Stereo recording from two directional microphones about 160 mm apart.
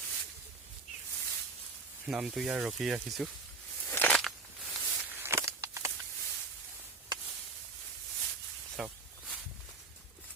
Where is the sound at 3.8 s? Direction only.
10° left (ahead or behind).